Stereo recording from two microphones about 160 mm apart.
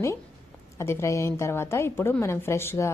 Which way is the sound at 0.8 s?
15° left (ahead or behind).